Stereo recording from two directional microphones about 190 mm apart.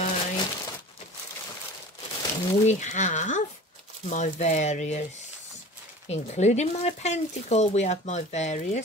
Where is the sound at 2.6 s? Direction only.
40° left (ahead or behind).